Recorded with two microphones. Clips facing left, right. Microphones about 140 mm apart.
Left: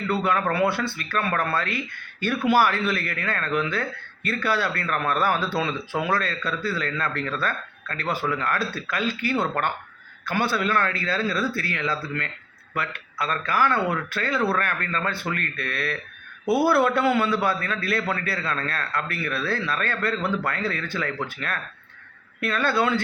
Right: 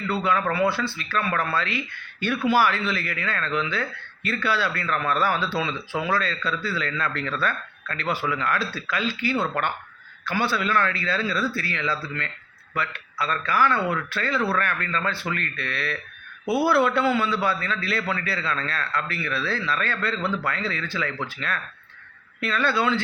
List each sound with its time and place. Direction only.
0.1 s speech: 50° left (ahead or behind)